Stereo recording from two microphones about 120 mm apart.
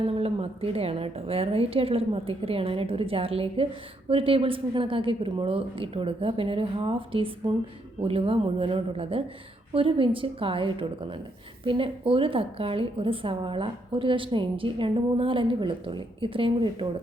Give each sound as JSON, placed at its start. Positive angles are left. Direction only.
{"t": 0.0, "sound": "a woman's voice", "side_deg": -55}